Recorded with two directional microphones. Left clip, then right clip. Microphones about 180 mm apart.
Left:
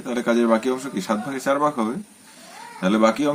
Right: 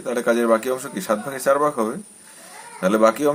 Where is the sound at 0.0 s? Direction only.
15° right (ahead or behind).